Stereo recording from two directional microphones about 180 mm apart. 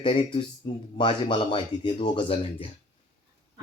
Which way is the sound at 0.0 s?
25° left (ahead or behind).